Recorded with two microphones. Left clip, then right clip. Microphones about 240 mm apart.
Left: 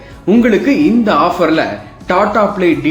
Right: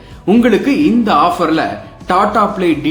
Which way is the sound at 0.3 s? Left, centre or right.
Centre.